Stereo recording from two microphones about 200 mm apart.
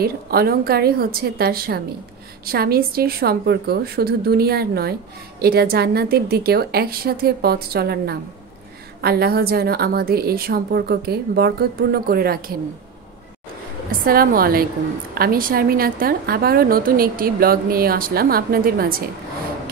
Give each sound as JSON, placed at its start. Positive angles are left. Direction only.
{"t": 0.0, "sound": "a woman's voice", "side_deg": -50}
{"t": 13.9, "sound": "a woman's voice", "side_deg": -45}